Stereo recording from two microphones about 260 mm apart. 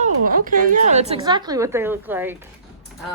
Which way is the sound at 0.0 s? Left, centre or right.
Right.